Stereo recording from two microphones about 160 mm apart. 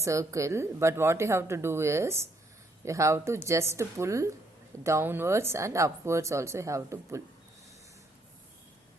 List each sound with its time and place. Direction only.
0.0 s speech: 20° right (ahead or behind)